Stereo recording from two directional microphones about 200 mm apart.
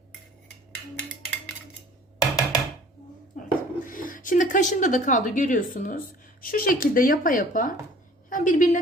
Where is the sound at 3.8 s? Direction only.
45° left (ahead or behind).